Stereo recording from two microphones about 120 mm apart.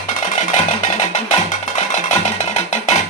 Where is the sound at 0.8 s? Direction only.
85° left.